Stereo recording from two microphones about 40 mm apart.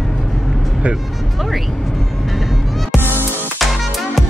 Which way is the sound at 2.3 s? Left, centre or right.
Centre.